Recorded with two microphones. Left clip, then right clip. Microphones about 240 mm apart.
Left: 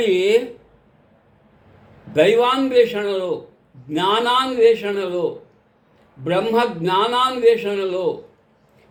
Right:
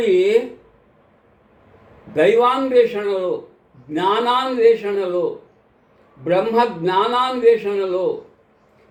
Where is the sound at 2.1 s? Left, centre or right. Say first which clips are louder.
Even; centre.